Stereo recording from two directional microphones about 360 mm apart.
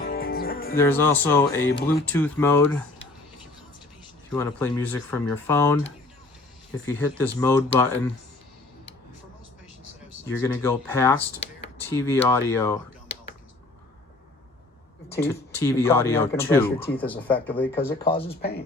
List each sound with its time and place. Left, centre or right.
0.0 s music: left
0.8 s speech: centre
4.4 s speech: centre
6.8 s speech: centre
10.4 s speech: centre
15.2 s speech: centre